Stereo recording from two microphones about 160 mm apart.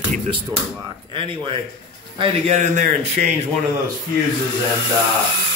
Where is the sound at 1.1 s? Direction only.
35° right (ahead or behind).